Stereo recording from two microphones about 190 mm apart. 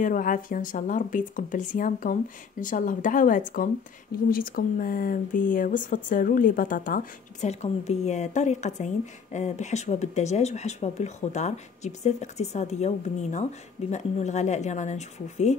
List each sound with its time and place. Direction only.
0.0 s a woman's voice: 45° left (ahead or behind)